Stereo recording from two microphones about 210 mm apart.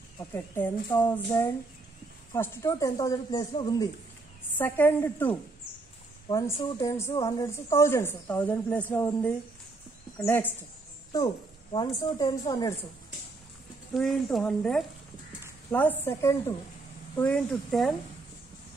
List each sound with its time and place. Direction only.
0.3 s speech: 10° left (ahead or behind)
11.7 s speech: 20° left (ahead or behind)
13.9 s a woman's voice: centre (ahead or behind)